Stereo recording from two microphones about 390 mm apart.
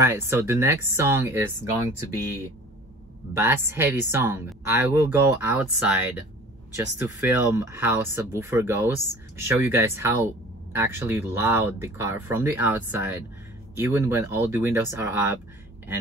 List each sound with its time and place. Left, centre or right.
0.0 s speech: centre
3.3 s speech: centre